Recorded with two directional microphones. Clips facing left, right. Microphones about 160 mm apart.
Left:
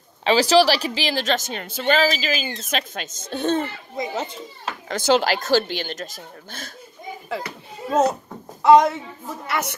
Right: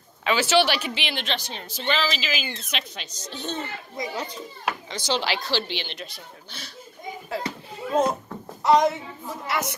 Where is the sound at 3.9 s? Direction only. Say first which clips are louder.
Left 4 dB; 25° left (ahead or behind).